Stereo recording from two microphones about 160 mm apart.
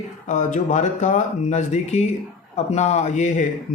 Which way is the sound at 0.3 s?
50° left (ahead or behind).